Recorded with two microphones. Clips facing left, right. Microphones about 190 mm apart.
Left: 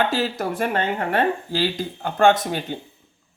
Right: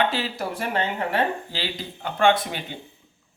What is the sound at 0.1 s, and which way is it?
Speech, 45° left (ahead or behind).